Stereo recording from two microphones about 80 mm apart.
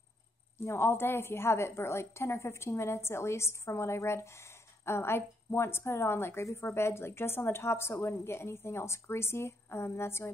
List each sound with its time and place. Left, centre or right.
0.6 s a woman's voice: left